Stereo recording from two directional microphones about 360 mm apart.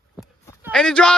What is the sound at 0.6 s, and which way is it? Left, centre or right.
Speech, centre.